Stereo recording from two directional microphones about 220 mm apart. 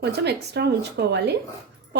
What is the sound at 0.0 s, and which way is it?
Speech, 50° right (ahead or behind).